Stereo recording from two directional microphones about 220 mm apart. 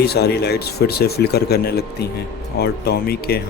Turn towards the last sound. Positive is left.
turn(degrees=45)  # may be behind; listen again after turning